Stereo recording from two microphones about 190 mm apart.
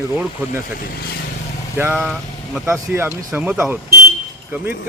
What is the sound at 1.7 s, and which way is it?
Speech, 10° right (ahead or behind).